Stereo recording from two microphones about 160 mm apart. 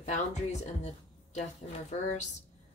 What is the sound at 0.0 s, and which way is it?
Speech, 45° left (ahead or behind).